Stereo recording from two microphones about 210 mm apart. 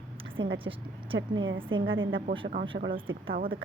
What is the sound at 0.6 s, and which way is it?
Speech, 25° right (ahead or behind).